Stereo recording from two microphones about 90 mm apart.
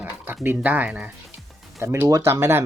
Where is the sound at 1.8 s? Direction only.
30° right (ahead or behind).